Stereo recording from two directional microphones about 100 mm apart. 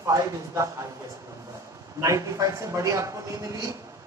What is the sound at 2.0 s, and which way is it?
Speech, 35° right (ahead or behind).